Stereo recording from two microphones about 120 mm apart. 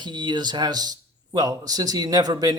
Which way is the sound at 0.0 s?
40° right (ahead or behind).